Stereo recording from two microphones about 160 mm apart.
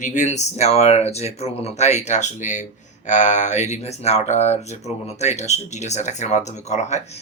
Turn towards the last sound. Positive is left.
turn(degrees=45)  # may be behind; listen again after turning